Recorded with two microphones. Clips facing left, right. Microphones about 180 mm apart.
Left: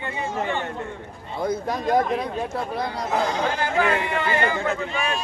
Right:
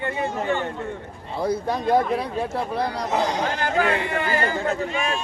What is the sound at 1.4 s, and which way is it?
Speech, 30° right (ahead or behind).